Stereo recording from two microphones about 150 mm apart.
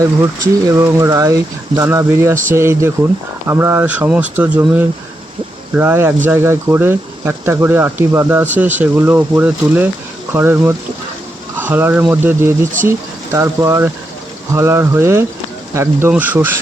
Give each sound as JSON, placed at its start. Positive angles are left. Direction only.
{"t": 0.7, "sound": "speech", "side_deg": -20}